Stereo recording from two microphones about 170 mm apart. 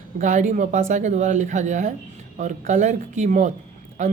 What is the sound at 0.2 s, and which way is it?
A woman's voice, 45° right (ahead or behind).